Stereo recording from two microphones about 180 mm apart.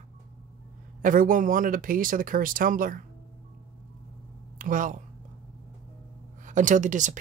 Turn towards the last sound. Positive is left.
turn(degrees=-45)  # may be behind; listen again after turning